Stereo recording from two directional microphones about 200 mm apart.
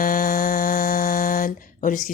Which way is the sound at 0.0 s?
45° left (ahead or behind).